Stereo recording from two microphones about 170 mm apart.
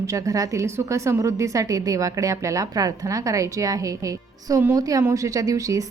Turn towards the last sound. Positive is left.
turn(degrees=-20)  # may be behind; listen again after turning